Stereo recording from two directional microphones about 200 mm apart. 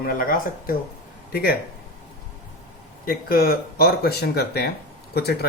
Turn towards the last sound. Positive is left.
turn(degrees=55)  # may be behind; listen again after turning